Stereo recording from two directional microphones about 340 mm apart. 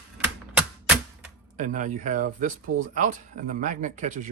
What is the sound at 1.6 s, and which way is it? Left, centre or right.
Speech, right.